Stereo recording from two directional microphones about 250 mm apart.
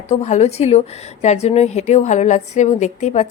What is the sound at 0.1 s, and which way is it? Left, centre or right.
A woman's voice, left.